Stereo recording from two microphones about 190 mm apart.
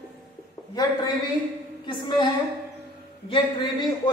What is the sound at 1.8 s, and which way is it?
Speech, 25° left (ahead or behind).